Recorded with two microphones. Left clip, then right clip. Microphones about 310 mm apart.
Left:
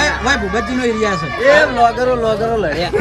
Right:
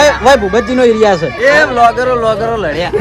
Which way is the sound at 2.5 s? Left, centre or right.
Right.